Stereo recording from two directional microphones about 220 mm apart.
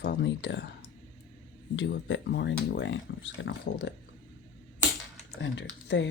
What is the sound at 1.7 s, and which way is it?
Speech, 55° left (ahead or behind).